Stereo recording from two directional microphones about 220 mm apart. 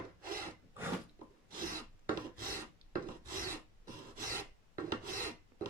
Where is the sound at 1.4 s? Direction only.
40° right (ahead or behind).